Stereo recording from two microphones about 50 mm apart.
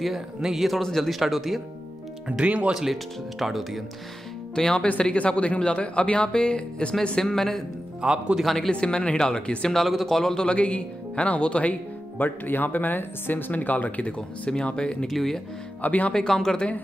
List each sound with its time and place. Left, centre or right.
0.4 s speech: centre
2.2 s speech: centre
2.7 s speech: centre
4.6 s speech: centre
8.0 s speech: centre
8.7 s speech: left
12.2 s speech: left; by 15.0 s centre
15.0 s speech: centre
15.8 s speech: left
16.1 s speech: centre